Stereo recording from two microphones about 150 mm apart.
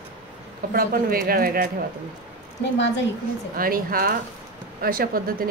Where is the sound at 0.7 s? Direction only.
70° right (ahead or behind).